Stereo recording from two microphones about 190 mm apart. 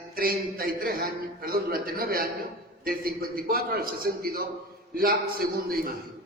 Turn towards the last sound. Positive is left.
turn(degrees=-50)  # may be behind; listen again after turning